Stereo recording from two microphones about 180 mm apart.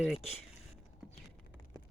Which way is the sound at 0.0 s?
Centre (ahead or behind).